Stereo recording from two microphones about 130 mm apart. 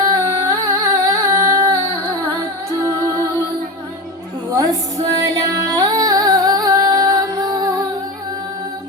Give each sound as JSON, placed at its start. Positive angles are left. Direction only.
{"t": 0.0, "sound": "singing", "side_deg": -30}
{"t": 2.8, "sound": "music", "side_deg": -25}
{"t": 5.0, "sound": "music", "side_deg": -25}